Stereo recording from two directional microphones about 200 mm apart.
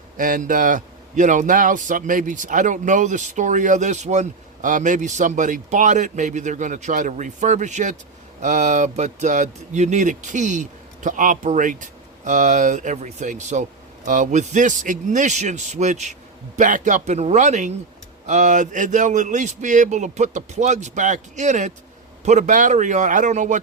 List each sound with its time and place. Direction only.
0.2 s speech: 40° right (ahead or behind)